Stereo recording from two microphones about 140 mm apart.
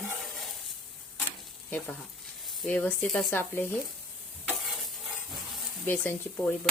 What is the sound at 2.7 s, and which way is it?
Speech, 10° left (ahead or behind).